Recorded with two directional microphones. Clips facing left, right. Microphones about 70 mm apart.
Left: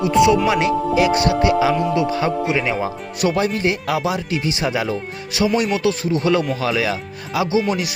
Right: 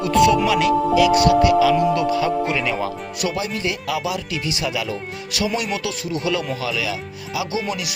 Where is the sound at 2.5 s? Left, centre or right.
Centre.